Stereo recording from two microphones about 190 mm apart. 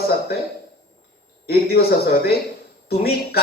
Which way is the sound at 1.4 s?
55° left (ahead or behind).